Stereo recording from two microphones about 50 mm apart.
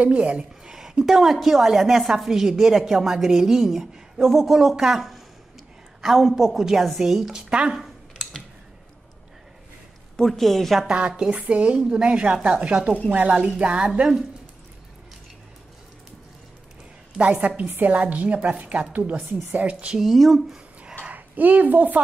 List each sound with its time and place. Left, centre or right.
0.0 s speech: right
0.7 s a woman's voice: centre
7.4 s speech: centre
7.8 s a sound: centre
10.1 s a woman's voice: centre
10.9 s a woman's voice: centre
17.3 s speech: right
17.6 s a woman's voice: right
17.9 s speech: right
20.0 s a woman's voice: centre
21.0 s a woman's voice: right